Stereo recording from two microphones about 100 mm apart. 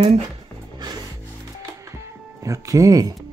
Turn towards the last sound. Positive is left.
turn(degrees=-40)  # may be behind; listen again after turning